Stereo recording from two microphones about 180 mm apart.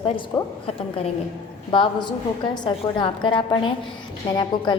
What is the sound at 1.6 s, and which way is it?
A woman's voice, 25° left (ahead or behind).